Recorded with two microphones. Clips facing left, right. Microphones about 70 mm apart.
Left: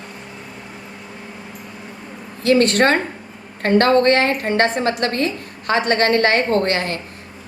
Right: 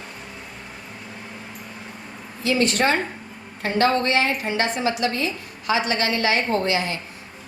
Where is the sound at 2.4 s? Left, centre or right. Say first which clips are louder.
Left 6 dB; left.